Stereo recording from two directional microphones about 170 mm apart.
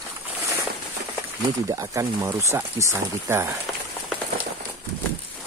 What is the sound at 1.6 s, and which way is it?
Speech, 20° right (ahead or behind).